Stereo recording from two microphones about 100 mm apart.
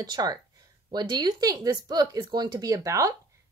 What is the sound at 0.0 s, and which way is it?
Speech, 40° right (ahead or behind).